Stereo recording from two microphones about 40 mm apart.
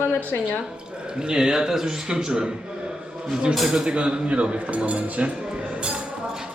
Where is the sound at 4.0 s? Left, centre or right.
Right.